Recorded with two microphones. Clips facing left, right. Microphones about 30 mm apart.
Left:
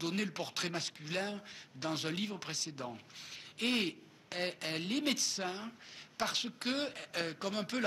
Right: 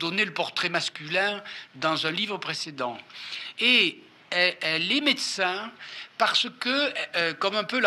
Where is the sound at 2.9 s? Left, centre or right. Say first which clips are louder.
Right 12 dB; right.